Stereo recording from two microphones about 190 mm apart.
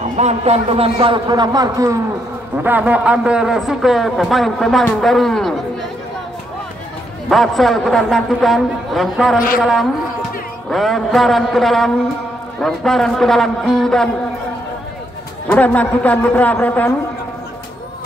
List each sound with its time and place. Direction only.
0.2 s a man's voice: 35° right (ahead or behind); by 5.9 s centre (ahead or behind)
7.2 s a man's voice: centre (ahead or behind)
15.4 s a man's voice: 10° left (ahead or behind)